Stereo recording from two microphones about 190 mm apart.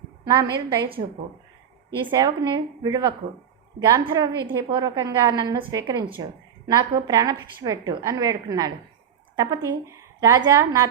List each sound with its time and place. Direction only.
0.3 s a woman's voice: 20° right (ahead or behind)
2.0 s a woman's voice: 20° right (ahead or behind)